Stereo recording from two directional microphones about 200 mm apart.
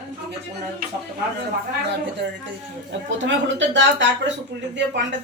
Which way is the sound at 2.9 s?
65° right (ahead or behind).